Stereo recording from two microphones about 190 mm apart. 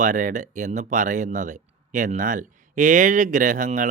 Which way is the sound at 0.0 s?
40° right (ahead or behind).